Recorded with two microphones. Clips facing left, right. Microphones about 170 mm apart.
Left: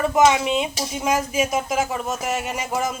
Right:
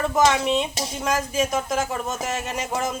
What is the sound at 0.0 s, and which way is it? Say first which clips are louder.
Speech: left 3 dB; 5° left (ahead or behind).